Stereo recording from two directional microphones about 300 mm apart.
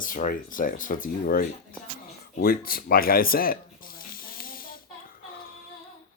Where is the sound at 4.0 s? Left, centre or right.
Left.